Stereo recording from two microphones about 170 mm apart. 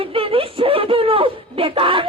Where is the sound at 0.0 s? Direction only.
30° right (ahead or behind).